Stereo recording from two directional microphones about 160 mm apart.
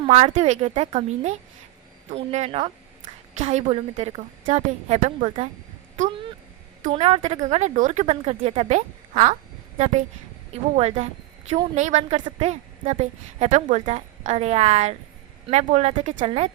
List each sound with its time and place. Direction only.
0.1 s a woman's voice: 45° right (ahead or behind)
6.9 s a woman's voice: 40° right (ahead or behind)